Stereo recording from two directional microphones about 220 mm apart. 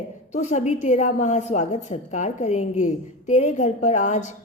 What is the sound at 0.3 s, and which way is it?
A woman's voice, 30° left (ahead or behind).